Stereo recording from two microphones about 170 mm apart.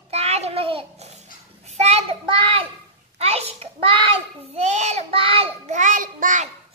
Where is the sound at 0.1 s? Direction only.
40° right (ahead or behind).